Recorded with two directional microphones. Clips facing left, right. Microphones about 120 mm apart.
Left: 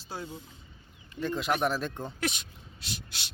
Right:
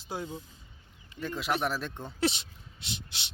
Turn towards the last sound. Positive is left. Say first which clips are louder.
# even
turn(degrees=-25)  # may be behind; listen again after turning